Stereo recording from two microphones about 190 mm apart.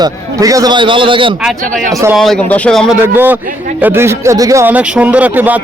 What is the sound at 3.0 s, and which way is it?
A man's voice, 10° right (ahead or behind).